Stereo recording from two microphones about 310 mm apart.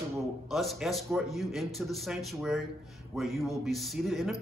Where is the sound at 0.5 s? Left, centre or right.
Centre.